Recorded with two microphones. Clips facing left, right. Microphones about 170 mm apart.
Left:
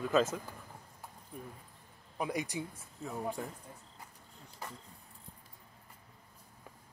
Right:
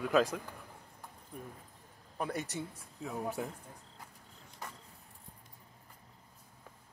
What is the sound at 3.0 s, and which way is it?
Speech, centre (ahead or behind).